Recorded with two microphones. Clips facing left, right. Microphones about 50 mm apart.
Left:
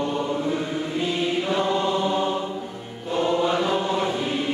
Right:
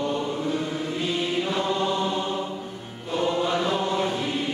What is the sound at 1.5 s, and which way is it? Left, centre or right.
Chant, centre.